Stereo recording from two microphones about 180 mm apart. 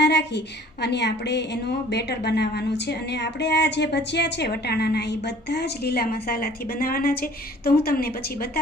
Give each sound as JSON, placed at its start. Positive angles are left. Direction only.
{"t": 0.0, "sound": "a woman's voice", "side_deg": 70}